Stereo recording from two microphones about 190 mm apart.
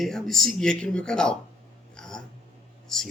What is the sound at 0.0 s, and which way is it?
Speech, centre (ahead or behind).